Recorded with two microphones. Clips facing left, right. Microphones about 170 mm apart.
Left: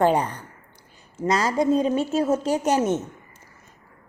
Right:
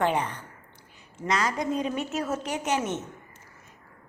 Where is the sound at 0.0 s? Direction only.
35° left (ahead or behind).